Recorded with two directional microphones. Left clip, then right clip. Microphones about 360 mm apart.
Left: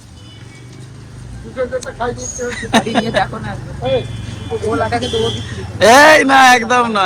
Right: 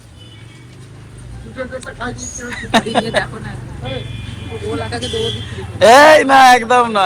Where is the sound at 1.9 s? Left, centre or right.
Centre.